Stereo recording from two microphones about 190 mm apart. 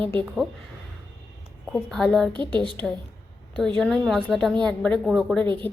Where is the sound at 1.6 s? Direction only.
Centre (ahead or behind).